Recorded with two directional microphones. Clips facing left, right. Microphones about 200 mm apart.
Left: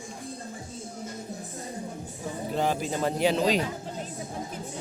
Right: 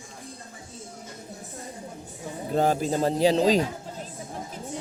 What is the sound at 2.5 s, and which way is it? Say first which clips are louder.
Speech: right 5 dB; 45° right (ahead or behind).